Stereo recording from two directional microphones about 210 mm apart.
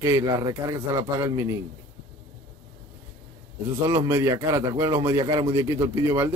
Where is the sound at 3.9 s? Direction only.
10° right (ahead or behind).